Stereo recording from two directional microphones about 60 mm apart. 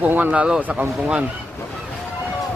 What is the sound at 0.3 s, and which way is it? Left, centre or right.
Speech, centre.